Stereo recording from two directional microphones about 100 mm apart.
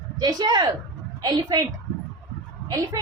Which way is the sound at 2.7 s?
35° right (ahead or behind).